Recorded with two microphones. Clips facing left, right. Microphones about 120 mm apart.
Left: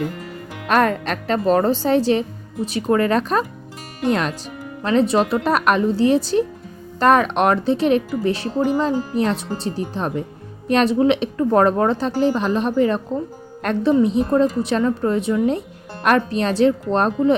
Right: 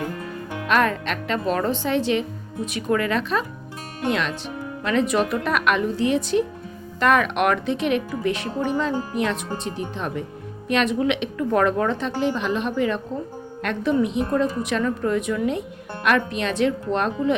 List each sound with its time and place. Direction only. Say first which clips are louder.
0.7 s a woman's voice: left 3 dB; 40° left (ahead or behind)